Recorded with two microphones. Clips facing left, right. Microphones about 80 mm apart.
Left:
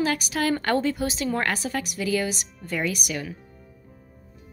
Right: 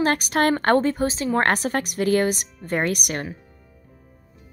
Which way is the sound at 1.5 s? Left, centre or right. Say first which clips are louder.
Right 5 dB; right.